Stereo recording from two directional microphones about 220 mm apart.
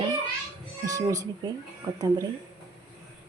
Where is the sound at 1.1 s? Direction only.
15° right (ahead or behind).